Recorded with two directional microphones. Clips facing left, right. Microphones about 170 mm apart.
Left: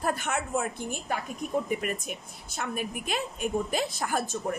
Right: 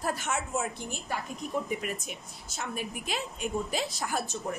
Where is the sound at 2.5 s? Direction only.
55° left (ahead or behind).